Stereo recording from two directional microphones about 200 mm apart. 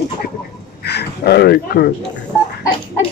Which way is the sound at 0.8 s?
55° left (ahead or behind).